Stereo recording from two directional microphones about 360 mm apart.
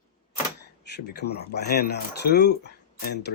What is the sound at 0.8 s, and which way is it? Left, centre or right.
Speech, left.